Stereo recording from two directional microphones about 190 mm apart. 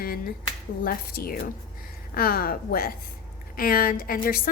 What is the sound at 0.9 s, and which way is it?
A woman's voice, 50° left (ahead or behind).